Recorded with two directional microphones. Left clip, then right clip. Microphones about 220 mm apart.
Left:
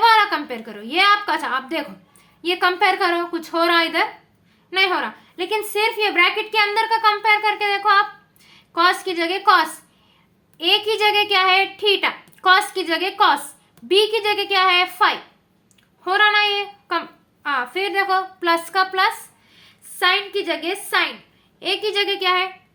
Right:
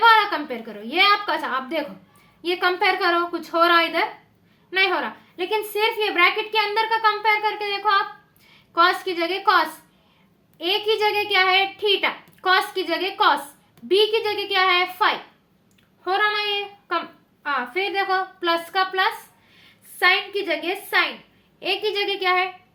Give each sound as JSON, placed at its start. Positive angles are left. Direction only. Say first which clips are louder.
{"t": 0.0, "sound": "a woman's voice", "louder": "left 1 dB", "side_deg": 20}
{"t": 16.0, "sound": "child singing", "louder": "left 5 dB", "side_deg": 25}
{"t": 17.4, "sound": "a woman's voice", "louder": "left 2 dB", "side_deg": 25}